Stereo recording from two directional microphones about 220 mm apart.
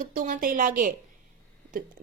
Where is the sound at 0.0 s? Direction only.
40° right (ahead or behind).